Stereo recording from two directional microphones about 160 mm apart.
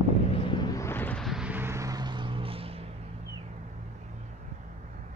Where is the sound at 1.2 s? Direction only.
5° right (ahead or behind); by 2.8 s 35° right (ahead or behind).